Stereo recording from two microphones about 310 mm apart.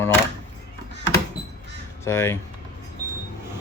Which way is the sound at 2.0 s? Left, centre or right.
Centre.